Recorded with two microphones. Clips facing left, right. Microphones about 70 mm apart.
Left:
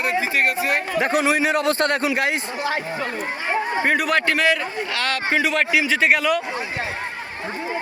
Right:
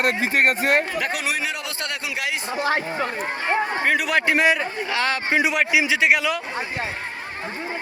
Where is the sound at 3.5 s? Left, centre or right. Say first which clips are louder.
Left 1 dB; centre.